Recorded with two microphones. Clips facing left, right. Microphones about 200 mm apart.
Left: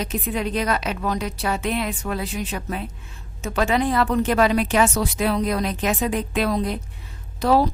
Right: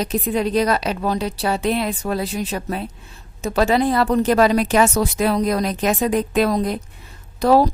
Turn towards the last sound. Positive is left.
turn(degrees=-40)  # may be behind; listen again after turning